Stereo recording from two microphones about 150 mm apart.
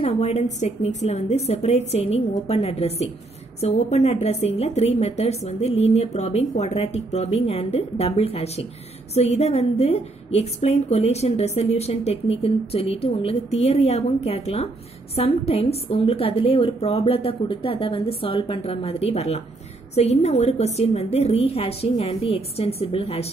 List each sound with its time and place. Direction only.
0.0 s a woman's voice: 45° left (ahead or behind)